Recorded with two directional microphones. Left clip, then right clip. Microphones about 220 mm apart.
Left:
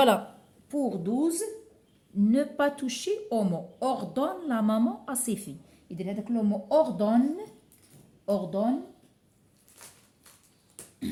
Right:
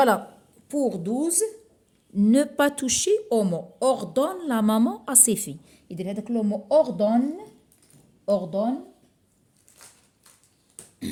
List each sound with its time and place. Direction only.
0.7 s a woman's voice: 50° right (ahead or behind)
8.2 s speech: 35° right (ahead or behind)